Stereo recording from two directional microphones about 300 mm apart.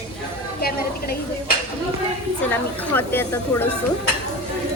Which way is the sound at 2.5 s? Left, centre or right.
Centre.